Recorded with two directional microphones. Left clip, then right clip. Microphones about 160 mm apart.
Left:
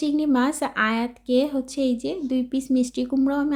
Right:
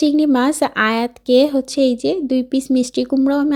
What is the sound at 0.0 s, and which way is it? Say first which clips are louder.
Speech: right 7 dB; 40° right (ahead or behind).